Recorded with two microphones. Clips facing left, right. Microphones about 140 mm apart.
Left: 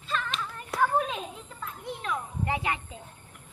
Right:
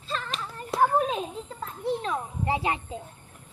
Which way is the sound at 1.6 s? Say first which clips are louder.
Right 9 dB; 30° right (ahead or behind).